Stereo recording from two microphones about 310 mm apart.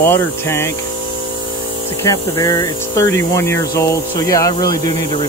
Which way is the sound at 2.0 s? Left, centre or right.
Centre.